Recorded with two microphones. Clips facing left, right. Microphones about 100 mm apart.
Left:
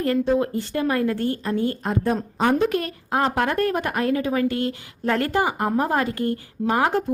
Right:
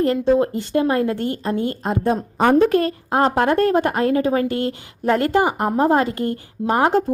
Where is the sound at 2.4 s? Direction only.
45° right (ahead or behind).